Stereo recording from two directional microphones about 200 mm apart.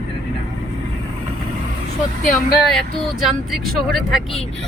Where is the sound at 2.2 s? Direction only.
45° left (ahead or behind).